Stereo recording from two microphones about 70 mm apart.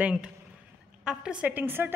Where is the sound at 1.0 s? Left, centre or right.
Centre; by 1.9 s right.